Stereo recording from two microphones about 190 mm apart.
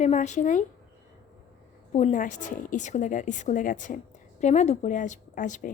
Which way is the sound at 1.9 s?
35° left (ahead or behind).